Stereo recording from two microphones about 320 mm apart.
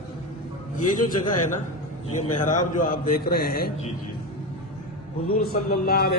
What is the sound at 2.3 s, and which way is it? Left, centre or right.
A man's voice, left.